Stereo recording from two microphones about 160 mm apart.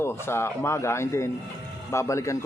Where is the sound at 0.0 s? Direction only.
15° left (ahead or behind).